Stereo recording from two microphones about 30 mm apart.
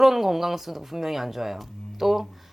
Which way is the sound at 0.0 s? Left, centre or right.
Centre.